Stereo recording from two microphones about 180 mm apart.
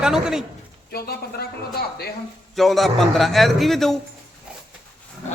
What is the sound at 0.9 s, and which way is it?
Speech, 60° left (ahead or behind).